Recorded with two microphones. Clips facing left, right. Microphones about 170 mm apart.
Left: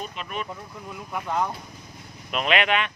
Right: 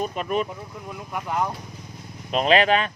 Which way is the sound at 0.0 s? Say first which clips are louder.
Right 8 dB; 45° right (ahead or behind).